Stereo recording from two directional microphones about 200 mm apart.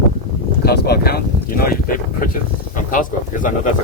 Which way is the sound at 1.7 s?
45° left (ahead or behind).